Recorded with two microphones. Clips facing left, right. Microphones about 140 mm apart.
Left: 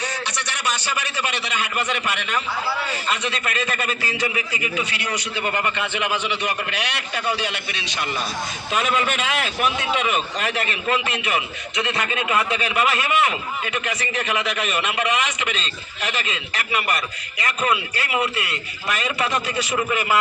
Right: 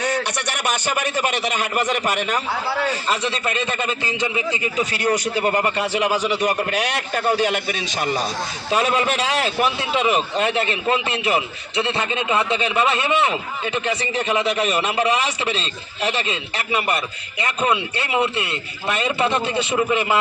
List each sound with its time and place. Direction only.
0.0 s a man's voice: 55° right (ahead or behind); by 4.7 s 25° right (ahead or behind)
4.8 s a man's voice: 40° right (ahead or behind); by 20.1 s 25° right (ahead or behind)